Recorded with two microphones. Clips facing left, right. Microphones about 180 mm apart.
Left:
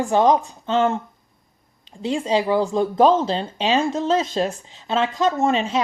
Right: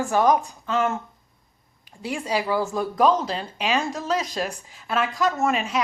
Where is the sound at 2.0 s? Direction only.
20° left (ahead or behind).